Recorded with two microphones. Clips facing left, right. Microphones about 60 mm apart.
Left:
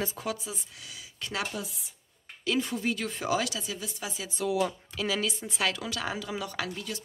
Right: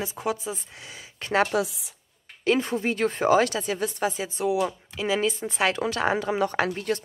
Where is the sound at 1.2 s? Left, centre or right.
Right.